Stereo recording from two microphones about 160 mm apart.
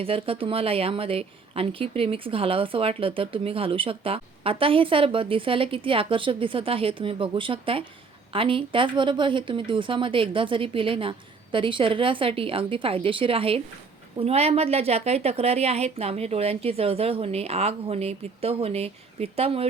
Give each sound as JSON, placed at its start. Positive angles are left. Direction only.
{"t": 0.0, "sound": "speech", "side_deg": -35}